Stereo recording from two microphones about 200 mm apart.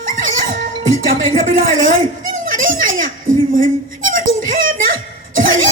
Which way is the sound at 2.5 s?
40° right (ahead or behind).